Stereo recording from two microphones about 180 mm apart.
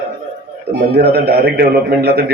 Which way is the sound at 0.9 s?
60° right (ahead or behind).